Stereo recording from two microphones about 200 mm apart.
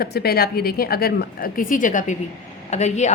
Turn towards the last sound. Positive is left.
turn(degrees=35)  # may be behind; listen again after turning